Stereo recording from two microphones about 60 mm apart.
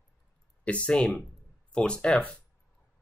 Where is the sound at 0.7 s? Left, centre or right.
Centre.